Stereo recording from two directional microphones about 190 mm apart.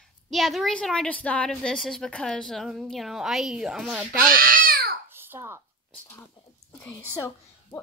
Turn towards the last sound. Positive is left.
turn(degrees=15)  # may be behind; listen again after turning